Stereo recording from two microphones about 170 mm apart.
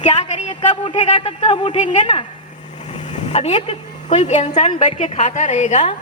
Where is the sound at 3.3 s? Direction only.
40° left (ahead or behind).